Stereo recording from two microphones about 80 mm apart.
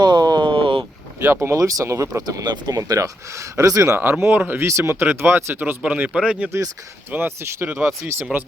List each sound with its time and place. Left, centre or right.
0.0 s a sound: right
1.2 s speech: right
1.5 s speech: right
2.2 s speech: right
3.9 s speech: right
5.8 s speech: centre
7.1 s speech: right
7.7 s speech: centre
8.0 s speech: right